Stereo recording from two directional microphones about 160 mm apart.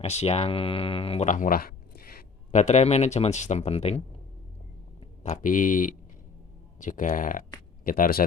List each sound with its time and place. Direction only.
0.0 s speech: 40° left (ahead or behind)
1.3 s a sound: 60° left (ahead or behind)
2.6 s speech: 45° left (ahead or behind)
5.2 s speech: 50° left (ahead or behind)